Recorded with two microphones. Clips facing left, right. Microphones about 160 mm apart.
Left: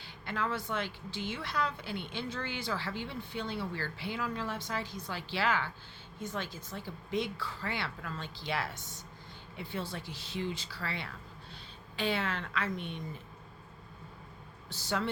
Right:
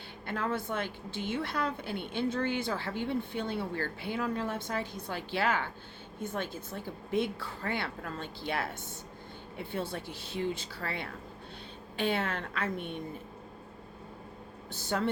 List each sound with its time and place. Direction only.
0.3 s a woman's voice: 50° right (ahead or behind)
14.7 s a woman's voice: 50° right (ahead or behind)